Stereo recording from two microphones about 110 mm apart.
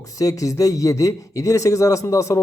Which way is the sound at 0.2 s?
30° left (ahead or behind).